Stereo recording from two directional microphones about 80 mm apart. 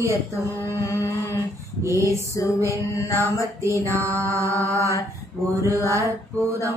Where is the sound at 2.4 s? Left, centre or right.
Left.